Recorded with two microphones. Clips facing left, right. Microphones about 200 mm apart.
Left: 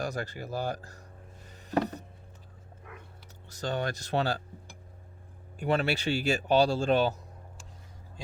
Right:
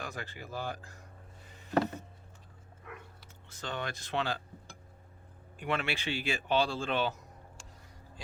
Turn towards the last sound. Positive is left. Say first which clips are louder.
# left 7 dB
turn(degrees=40)  # may be behind; listen again after turning